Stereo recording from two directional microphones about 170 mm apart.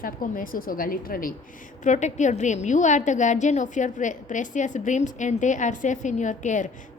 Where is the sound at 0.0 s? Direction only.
55° left (ahead or behind).